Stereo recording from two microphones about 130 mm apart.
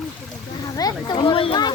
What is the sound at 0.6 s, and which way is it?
A child's voice, 30° left (ahead or behind).